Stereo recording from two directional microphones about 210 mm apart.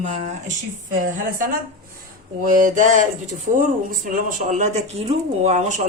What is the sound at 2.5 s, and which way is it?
Speech, 40° right (ahead or behind).